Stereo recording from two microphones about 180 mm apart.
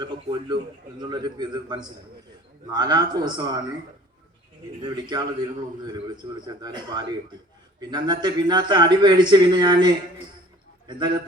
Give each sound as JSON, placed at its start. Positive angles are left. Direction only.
{"t": 0.0, "sound": "a man's voice", "side_deg": -25}
{"t": 4.8, "sound": "a man's voice", "side_deg": -25}